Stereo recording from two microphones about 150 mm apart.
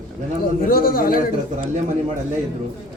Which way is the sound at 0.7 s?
75° left (ahead or behind).